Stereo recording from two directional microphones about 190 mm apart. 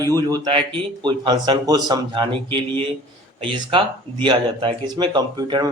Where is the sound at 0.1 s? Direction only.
25° right (ahead or behind).